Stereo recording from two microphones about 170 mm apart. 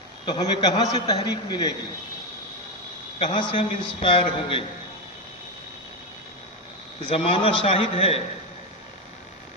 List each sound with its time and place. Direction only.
0.3 s a man's voice: 25° left (ahead or behind)
3.2 s a man's voice: 30° left (ahead or behind)
7.1 s a man's voice: 35° left (ahead or behind)